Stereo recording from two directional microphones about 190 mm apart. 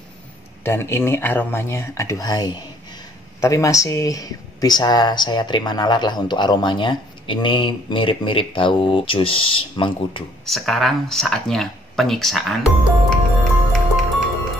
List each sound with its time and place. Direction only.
0.7 s speech: 15° left (ahead or behind)
10.4 s speech: centre (ahead or behind)
13.4 s music: centre (ahead or behind)